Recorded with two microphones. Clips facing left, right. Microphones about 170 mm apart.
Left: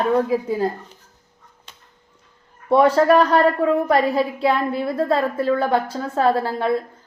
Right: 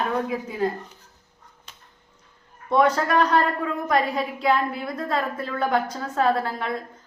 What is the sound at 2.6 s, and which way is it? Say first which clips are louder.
A woman's voice: left 6 dB; 30° left (ahead or behind).